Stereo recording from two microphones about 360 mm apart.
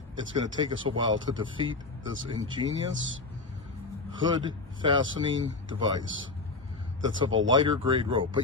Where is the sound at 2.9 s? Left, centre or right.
Right.